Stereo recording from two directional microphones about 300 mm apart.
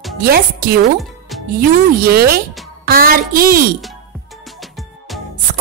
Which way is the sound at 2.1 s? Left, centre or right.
Right.